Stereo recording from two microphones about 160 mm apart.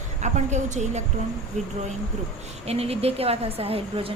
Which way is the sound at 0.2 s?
45° right (ahead or behind).